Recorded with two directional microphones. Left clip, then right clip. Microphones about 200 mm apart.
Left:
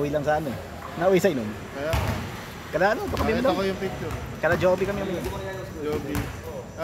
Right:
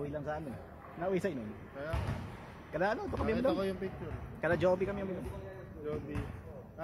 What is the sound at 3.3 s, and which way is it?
Speech, 55° right (ahead or behind).